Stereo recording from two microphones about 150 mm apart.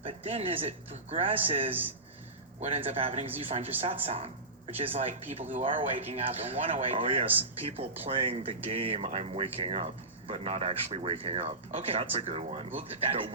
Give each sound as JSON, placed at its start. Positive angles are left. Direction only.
{"t": 0.0, "sound": "speech", "side_deg": -40}